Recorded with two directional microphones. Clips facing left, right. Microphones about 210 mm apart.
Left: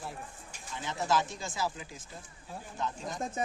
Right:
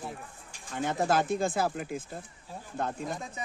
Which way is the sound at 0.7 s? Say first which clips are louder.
Right 4 dB; 55° right (ahead or behind).